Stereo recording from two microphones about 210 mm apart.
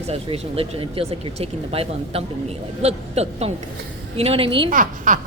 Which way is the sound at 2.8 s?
30° right (ahead or behind).